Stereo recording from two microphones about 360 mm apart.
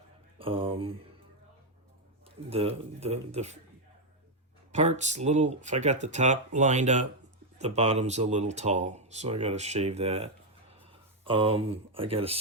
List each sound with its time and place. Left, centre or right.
0.3 s a sound: centre
2.5 s speech: centre
4.7 s speech: centre